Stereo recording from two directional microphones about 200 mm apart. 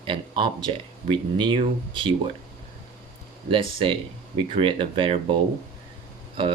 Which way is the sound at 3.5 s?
25° right (ahead or behind).